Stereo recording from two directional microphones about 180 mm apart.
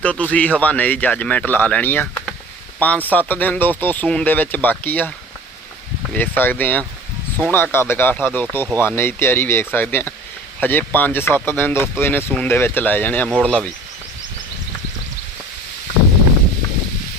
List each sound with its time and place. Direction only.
0.0 s speech: 5° left (ahead or behind)
6.1 s speech: 10° left (ahead or behind)